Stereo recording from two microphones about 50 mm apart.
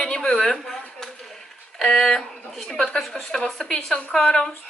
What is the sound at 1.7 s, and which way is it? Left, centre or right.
A woman's voice, centre.